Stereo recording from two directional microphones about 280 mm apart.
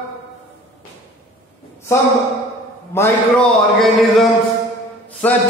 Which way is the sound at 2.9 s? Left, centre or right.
Centre.